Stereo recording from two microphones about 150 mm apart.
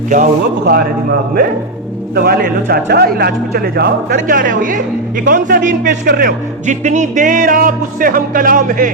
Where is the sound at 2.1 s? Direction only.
85° right.